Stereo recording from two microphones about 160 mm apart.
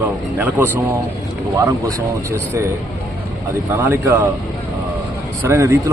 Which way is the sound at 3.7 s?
10° right (ahead or behind).